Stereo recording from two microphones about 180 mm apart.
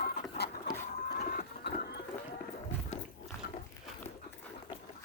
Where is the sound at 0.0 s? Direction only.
65° left (ahead or behind).